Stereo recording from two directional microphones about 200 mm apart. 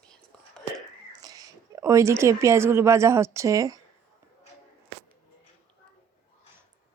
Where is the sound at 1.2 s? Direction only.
20° right (ahead or behind).